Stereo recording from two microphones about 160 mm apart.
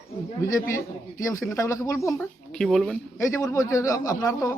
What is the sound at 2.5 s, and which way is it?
Speech, centre (ahead or behind).